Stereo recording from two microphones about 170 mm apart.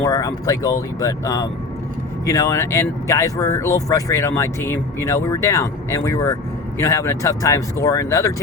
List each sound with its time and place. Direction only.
0.0 s speech: 20° left (ahead or behind)